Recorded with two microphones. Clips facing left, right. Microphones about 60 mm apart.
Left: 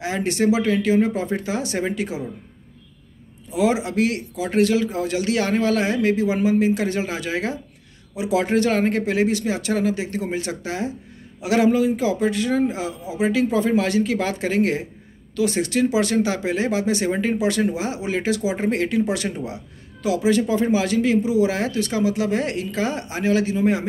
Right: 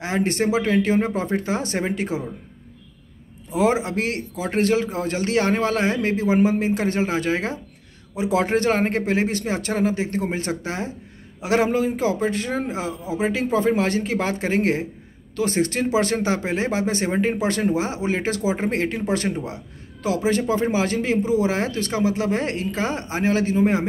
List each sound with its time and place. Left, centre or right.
0.0 s a man's voice: right
3.5 s a man's voice: right